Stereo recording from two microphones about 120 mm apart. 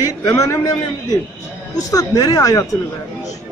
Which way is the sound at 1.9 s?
30° left (ahead or behind).